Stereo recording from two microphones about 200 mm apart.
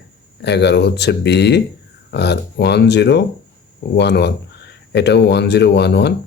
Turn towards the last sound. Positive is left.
turn(degrees=55)  # may be behind; listen again after turning